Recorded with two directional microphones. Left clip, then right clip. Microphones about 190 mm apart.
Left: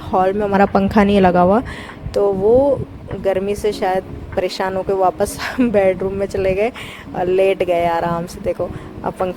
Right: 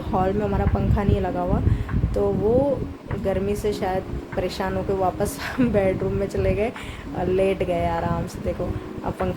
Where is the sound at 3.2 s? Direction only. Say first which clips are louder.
Left 7 dB; 45° left (ahead or behind).